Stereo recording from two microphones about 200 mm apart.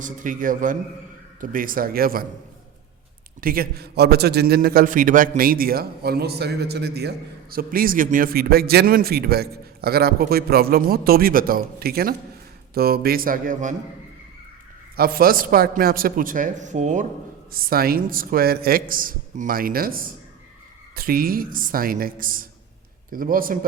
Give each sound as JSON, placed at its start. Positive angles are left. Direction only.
{"t": 0.0, "sound": "a man's voice", "side_deg": -40}
{"t": 3.4, "sound": "a man's voice", "side_deg": -45}
{"t": 14.9, "sound": "a man's voice", "side_deg": -50}